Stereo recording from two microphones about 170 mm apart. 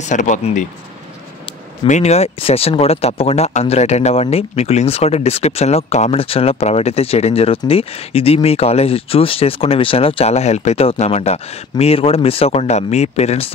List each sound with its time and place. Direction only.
0.1 s speech: 45° left (ahead or behind)
1.9 s speech: 40° left (ahead or behind)